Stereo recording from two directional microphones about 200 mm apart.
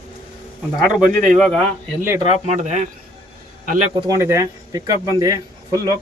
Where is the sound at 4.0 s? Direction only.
15° right (ahead or behind).